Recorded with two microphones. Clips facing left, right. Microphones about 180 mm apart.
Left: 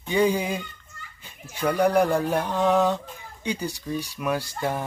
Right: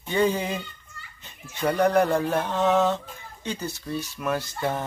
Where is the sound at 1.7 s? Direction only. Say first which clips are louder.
Even; 10° left (ahead or behind).